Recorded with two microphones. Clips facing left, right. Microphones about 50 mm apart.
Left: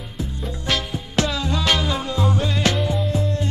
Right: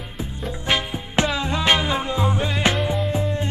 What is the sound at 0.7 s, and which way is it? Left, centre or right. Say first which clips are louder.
Music: right 1 dB; right.